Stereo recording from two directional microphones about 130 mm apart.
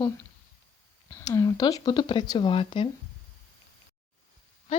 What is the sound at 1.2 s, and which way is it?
Speech, 25° left (ahead or behind).